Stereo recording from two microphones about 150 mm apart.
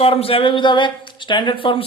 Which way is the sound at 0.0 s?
40° left (ahead or behind).